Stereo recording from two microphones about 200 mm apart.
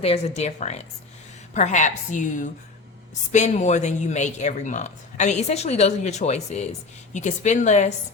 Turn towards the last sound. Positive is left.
turn(degrees=35)  # may be behind; listen again after turning